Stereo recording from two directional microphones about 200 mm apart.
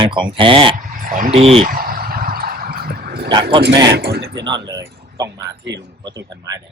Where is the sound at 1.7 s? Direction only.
45° right (ahead or behind).